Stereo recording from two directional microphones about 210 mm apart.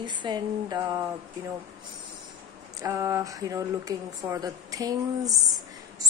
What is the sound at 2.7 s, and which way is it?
Speech, 15° right (ahead or behind).